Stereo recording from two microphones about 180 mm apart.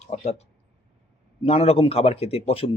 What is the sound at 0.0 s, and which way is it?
Speech, 35° left (ahead or behind).